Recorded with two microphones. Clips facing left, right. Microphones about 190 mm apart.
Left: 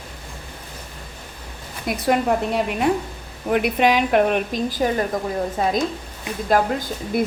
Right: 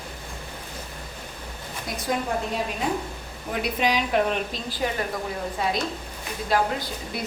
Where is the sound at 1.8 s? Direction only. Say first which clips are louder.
Left 8 dB; 65° left (ahead or behind).